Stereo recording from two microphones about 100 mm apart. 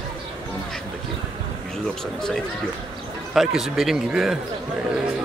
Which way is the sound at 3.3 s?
5° right (ahead or behind).